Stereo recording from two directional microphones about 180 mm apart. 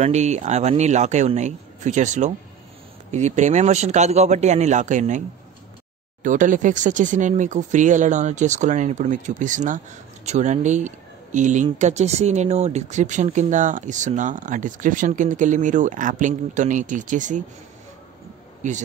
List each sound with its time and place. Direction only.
0.0 s speech: 40° right (ahead or behind)
6.2 s speech: 45° right (ahead or behind)